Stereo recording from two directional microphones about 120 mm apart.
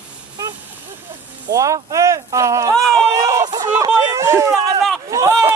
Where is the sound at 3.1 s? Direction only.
25° right (ahead or behind).